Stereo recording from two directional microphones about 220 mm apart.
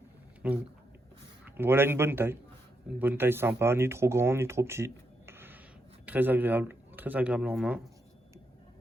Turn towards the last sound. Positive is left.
turn(degrees=-5)  # may be behind; listen again after turning